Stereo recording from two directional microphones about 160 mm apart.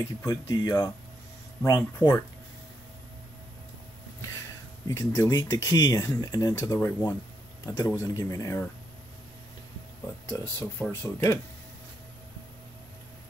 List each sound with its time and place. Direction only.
0.2 s speech: 20° left (ahead or behind)
4.8 s speech: 15° left (ahead or behind)
10.2 s speech: 15° left (ahead or behind)